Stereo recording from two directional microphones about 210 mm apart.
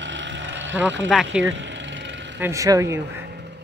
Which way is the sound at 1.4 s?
60° right (ahead or behind).